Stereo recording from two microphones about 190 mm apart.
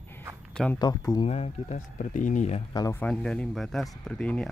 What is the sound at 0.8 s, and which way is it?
Speech, 20° left (ahead or behind).